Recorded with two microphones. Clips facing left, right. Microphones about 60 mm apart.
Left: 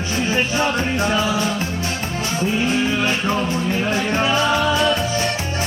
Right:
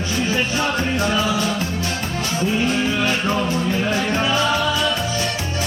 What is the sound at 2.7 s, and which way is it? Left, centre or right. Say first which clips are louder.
Music: left 1 dB; centre.